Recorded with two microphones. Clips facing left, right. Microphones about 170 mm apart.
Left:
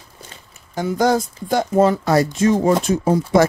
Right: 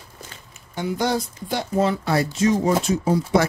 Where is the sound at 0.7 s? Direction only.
45° left (ahead or behind).